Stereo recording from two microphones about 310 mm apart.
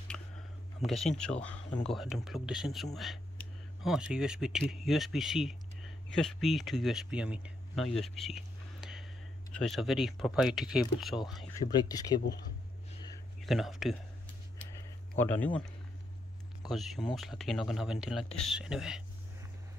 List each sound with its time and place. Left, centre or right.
0.8 s speech: centre
11.5 s speech: centre
13.4 s speech: centre
15.1 s speech: centre